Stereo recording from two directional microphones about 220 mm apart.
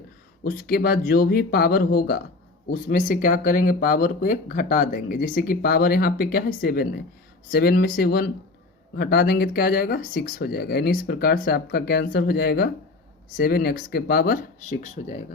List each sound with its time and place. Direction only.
0.4 s speech: 40° left (ahead or behind)